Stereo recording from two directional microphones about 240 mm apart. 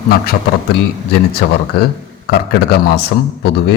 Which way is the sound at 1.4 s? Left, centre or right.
Left.